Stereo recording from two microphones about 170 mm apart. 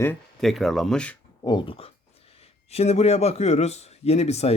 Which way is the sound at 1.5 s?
30° left (ahead or behind).